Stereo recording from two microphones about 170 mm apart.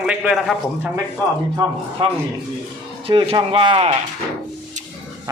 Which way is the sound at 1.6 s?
30° right (ahead or behind).